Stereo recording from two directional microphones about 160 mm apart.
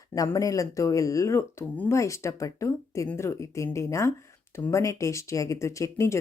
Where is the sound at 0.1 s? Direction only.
20° left (ahead or behind).